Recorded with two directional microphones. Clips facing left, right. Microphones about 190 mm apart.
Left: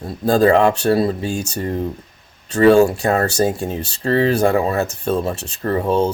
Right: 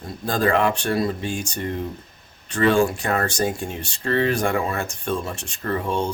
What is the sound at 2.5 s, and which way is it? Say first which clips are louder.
Speech: left 7 dB; 40° left (ahead or behind).